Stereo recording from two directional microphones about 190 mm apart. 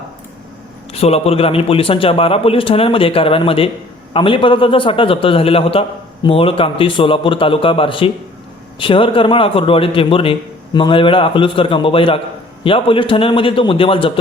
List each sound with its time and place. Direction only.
0.9 s a man's voice: 35° left (ahead or behind)